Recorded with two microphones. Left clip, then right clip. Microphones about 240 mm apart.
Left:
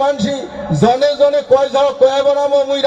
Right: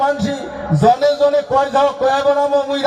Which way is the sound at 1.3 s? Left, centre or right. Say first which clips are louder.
Left 2 dB; left.